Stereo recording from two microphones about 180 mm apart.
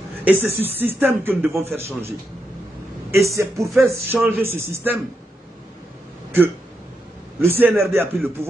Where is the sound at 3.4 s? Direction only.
15° right (ahead or behind).